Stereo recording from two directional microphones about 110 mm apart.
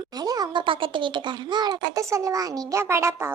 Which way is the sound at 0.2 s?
35° right (ahead or behind).